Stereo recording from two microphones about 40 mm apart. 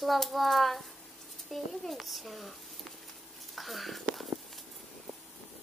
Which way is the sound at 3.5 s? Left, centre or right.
Centre.